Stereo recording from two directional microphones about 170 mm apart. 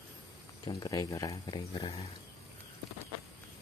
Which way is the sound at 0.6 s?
25° left (ahead or behind).